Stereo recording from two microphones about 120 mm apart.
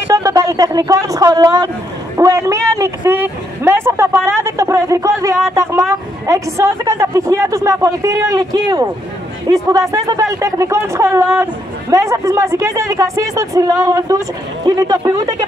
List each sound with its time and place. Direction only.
0.1 s a man's voice: 30° right (ahead or behind)